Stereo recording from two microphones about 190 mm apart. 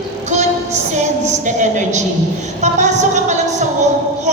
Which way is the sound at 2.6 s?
40° right (ahead or behind).